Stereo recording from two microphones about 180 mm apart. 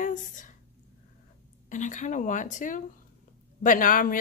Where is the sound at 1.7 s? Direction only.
45° left (ahead or behind).